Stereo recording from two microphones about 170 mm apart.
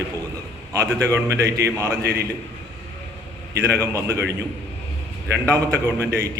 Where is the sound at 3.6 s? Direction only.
15° right (ahead or behind).